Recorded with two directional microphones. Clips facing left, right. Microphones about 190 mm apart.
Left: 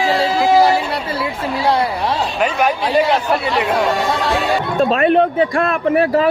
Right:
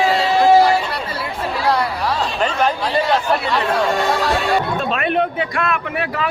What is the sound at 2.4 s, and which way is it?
Speech, 10° left (ahead or behind).